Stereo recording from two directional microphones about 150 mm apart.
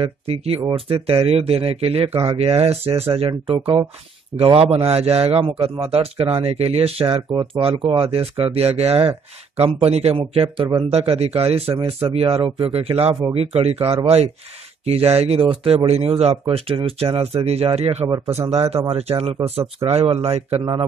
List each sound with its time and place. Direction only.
0.0 s speech: 40° right (ahead or behind)
18.0 s a man's voice: 25° right (ahead or behind)
18.5 s speech: 45° right (ahead or behind)